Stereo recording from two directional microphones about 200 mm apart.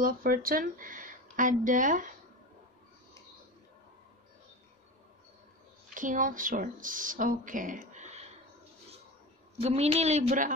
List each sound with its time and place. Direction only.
0.0 s speech: 45° right (ahead or behind)
5.9 s speech: 40° right (ahead or behind)
9.6 s speech: 30° right (ahead or behind)